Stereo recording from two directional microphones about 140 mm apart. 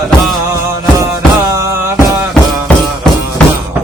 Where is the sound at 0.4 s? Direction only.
20° right (ahead or behind).